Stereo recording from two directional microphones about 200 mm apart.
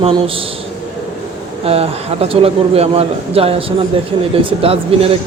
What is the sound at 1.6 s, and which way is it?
A man's voice, 30° right (ahead or behind).